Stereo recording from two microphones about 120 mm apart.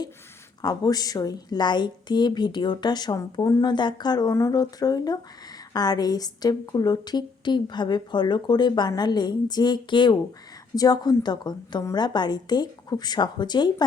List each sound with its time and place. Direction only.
0.6 s a woman's voice: 35° left (ahead or behind)